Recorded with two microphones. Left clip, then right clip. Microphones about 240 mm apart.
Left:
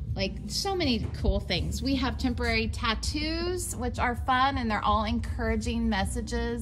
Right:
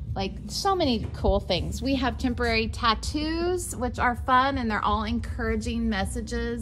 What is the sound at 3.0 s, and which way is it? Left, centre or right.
Speech, centre.